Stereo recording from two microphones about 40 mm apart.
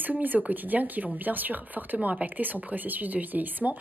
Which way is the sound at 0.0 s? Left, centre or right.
Right.